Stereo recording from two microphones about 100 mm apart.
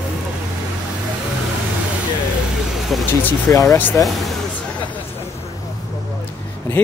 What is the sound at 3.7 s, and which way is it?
Speech, 20° left (ahead or behind).